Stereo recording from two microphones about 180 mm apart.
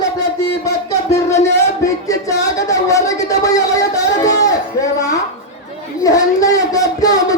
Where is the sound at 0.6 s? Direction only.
15° left (ahead or behind).